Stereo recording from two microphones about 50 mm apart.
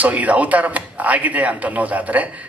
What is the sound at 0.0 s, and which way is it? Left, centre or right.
A man's voice, right.